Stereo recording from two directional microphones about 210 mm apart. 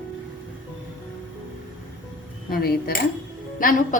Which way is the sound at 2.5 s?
45° left (ahead or behind).